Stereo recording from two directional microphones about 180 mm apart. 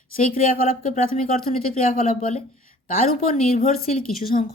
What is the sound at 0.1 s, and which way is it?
Speech, 50° left (ahead or behind).